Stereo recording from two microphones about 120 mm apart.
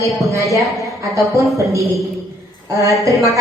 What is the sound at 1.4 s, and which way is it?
A woman's voice, 25° right (ahead or behind).